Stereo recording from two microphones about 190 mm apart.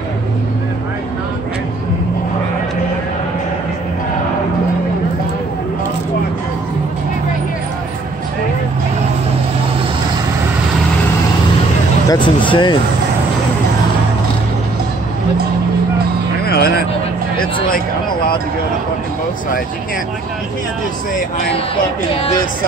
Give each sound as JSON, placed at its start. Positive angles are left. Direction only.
{"t": 12.1, "sound": "speech", "side_deg": 25}
{"t": 16.4, "sound": "music", "side_deg": 55}
{"t": 17.6, "sound": "a sound", "side_deg": 50}